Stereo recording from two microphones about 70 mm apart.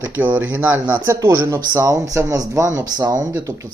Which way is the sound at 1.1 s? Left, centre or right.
Right.